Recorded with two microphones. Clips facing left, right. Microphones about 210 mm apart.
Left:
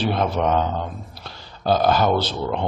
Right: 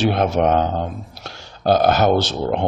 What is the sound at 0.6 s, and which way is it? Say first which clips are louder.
Speech: right 3 dB; 45° right (ahead or behind).